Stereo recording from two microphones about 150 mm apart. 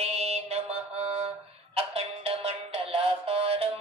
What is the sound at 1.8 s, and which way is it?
Music, 40° right (ahead or behind).